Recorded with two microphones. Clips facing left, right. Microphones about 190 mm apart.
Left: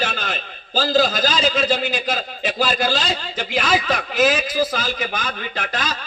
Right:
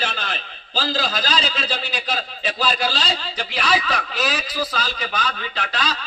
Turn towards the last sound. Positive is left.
turn(degrees=45)  # may be behind; listen again after turning